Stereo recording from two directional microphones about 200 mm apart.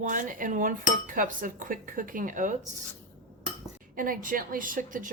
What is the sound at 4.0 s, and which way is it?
Speech, 45° right (ahead or behind).